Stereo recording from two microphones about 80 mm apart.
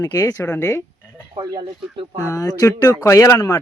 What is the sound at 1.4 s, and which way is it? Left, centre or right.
Speech, right.